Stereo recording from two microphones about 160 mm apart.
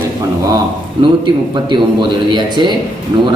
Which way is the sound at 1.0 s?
35° right (ahead or behind).